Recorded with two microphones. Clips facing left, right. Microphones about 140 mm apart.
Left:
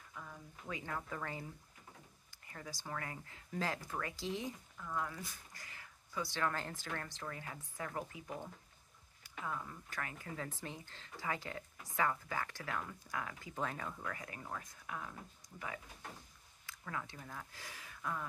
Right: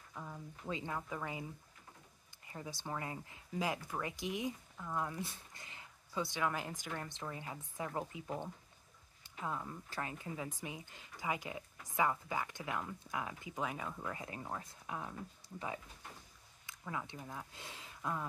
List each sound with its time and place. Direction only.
0.1 s a sound: 25° right (ahead or behind)
0.9 s speech: 10° right (ahead or behind)
2.5 s speech: 20° right (ahead or behind)
9.5 s speech: 25° right (ahead or behind); by 14.0 s 10° right (ahead or behind)
14.0 s speech: 25° right (ahead or behind)
16.6 s speech: 20° right (ahead or behind)